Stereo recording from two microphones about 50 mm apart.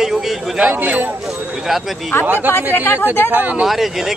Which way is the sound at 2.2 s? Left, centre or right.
Right.